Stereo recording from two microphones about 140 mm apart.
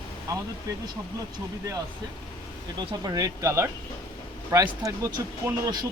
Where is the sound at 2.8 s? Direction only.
30° right (ahead or behind).